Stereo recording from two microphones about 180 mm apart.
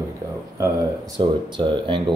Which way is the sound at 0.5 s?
20° right (ahead or behind).